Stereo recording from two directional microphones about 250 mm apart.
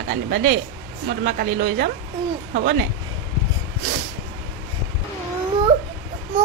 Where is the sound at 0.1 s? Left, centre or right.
Right.